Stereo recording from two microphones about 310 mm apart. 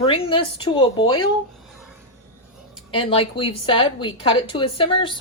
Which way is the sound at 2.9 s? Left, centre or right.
Centre.